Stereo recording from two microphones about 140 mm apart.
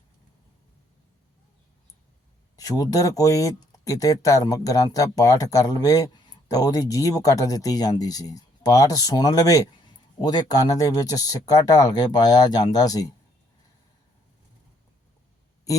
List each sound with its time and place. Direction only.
2.6 s speech: 25° left (ahead or behind)